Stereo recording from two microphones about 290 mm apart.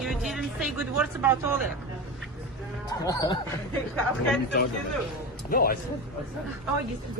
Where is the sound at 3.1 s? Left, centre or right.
Centre.